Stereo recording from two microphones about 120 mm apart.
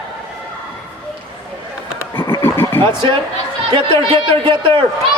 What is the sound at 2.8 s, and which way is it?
A man's voice, 40° right (ahead or behind).